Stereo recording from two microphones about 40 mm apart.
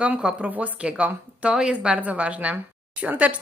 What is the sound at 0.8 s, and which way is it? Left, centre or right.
Speech, right.